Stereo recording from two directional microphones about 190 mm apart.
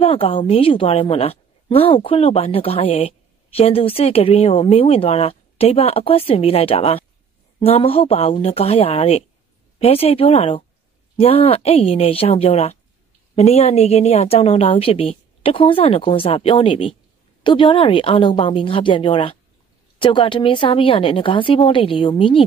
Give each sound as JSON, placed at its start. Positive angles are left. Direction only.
{"t": 0.0, "sound": "a woman's voice", "side_deg": 30}